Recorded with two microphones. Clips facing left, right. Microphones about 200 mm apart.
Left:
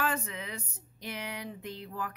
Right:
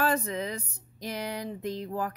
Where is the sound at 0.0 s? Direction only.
40° right (ahead or behind).